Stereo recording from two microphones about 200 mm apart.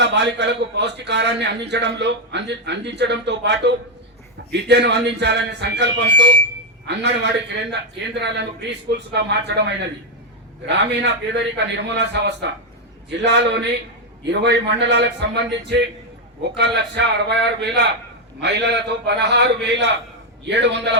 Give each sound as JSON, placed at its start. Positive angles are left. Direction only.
{"t": 0.0, "sound": "a man's voice", "side_deg": -60}